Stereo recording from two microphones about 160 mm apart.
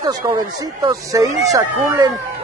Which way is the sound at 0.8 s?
20° right (ahead or behind).